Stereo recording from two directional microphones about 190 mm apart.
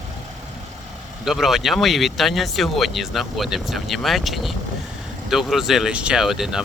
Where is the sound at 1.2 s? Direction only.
Centre (ahead or behind).